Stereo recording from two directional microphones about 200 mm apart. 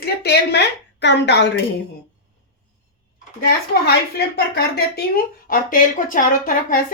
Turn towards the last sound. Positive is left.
turn(degrees=40)  # may be behind; listen again after turning